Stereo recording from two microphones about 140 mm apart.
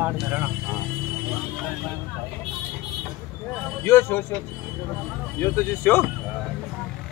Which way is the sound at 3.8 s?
15° left (ahead or behind).